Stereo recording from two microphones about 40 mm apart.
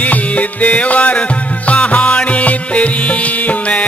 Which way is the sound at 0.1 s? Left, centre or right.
Left.